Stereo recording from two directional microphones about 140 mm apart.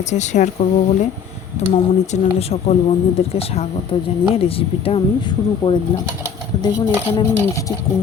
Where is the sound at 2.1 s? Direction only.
50° left (ahead or behind).